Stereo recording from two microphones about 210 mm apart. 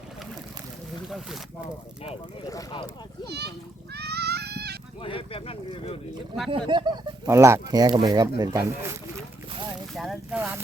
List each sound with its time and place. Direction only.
1.0 s speech: centre (ahead or behind)
2.5 s speech: 15° left (ahead or behind)
3.2 s a child's voice: 50° right (ahead or behind)
3.9 s goat: 50° right (ahead or behind)
5.0 s speech: 25° left (ahead or behind)
6.5 s speech: 20° right (ahead or behind)
9.9 s speech: centre (ahead or behind)